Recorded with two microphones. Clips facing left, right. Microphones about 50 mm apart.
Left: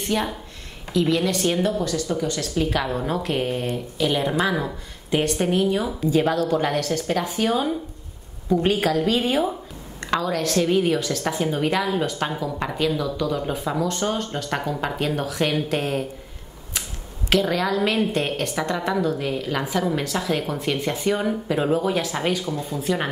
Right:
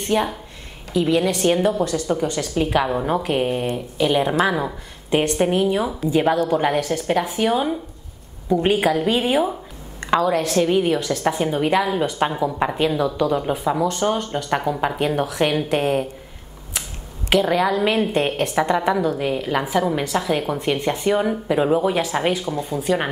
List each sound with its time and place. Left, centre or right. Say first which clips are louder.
0.1 s a woman's voice: right 6 dB; centre
17.3 s a woman's voice: right 3 dB; centre